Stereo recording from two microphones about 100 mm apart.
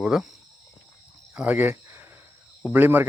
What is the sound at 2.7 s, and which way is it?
Speech, 20° right (ahead or behind).